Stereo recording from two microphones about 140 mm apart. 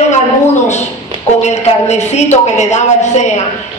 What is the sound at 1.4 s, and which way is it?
Speech, 55° left (ahead or behind).